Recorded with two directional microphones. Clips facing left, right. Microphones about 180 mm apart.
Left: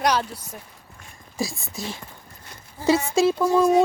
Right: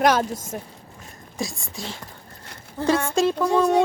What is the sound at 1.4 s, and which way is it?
Speech, centre (ahead or behind).